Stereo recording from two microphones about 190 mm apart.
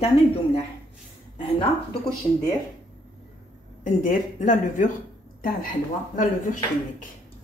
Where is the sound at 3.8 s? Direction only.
40° left (ahead or behind).